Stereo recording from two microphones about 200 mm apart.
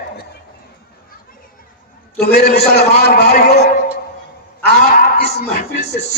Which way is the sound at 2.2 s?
55° left (ahead or behind).